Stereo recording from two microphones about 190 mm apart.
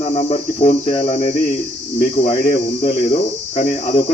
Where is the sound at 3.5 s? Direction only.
35° left (ahead or behind).